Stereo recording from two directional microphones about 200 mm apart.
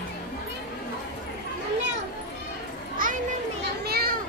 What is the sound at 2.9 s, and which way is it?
Children playing, 45° right (ahead or behind).